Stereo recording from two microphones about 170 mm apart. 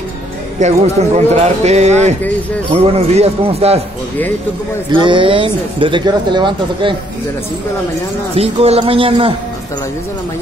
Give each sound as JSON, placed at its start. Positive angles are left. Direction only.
{"t": 0.6, "sound": "speech", "side_deg": -40}
{"t": 4.9, "sound": "speech", "side_deg": -30}
{"t": 8.4, "sound": "speech", "side_deg": -35}